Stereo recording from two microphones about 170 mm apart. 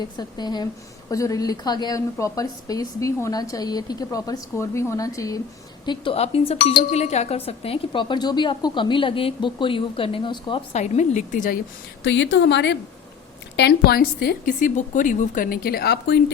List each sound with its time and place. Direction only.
0.0 s a woman's voice: 25° left (ahead or behind)
6.1 s speech: 35° left (ahead or behind)
10.7 s speech: 40° left (ahead or behind)
12.0 s speech: 90° left
13.6 s a woman's voice: 75° left (ahead or behind)